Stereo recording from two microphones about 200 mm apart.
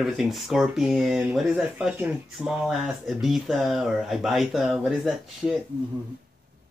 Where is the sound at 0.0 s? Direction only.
Centre (ahead or behind).